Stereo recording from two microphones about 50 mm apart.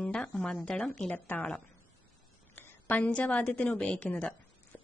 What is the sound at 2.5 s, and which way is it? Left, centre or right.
A woman's voice, left.